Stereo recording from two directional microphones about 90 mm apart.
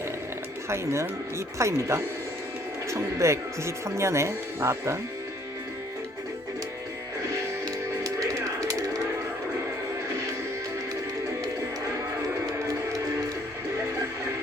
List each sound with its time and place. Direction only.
0.7 s speech: 30° right (ahead or behind)
7.6 s music: 40° right (ahead or behind)